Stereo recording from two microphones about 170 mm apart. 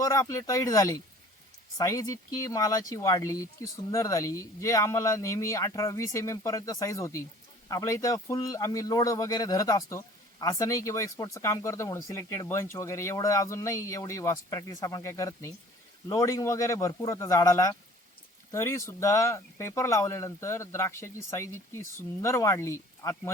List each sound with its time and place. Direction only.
0.0 s speech: 20° left (ahead or behind)